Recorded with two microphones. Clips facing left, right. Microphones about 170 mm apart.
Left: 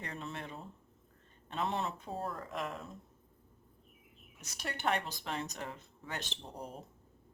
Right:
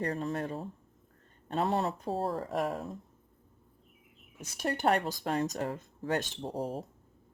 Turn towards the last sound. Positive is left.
turn(degrees=-40)  # may be behind; listen again after turning